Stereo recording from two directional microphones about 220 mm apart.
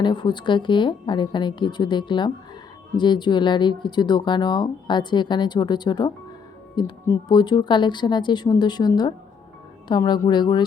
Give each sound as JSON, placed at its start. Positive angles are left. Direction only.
{"t": 0.0, "sound": "speech", "side_deg": 20}